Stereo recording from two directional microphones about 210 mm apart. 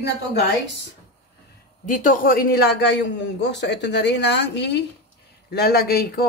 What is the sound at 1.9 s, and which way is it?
A man's voice, 40° left (ahead or behind).